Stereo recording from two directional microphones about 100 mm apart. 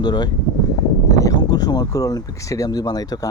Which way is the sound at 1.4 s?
40° left (ahead or behind).